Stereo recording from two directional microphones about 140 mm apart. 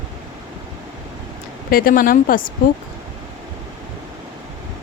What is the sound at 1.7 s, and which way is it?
Speech, 90° left.